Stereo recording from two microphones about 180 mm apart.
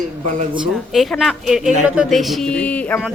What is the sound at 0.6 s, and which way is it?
A woman's voice, centre (ahead or behind).